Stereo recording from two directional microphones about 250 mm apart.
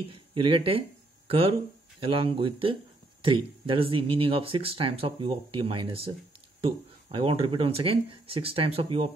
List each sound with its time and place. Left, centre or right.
0.1 s speech: centre